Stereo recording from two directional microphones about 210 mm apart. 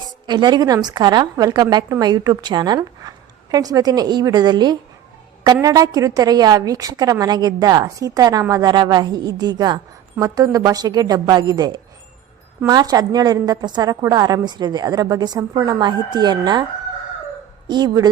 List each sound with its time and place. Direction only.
0.3 s a woman's voice: 20° right (ahead or behind)
17.7 s a woman's voice: 20° right (ahead or behind)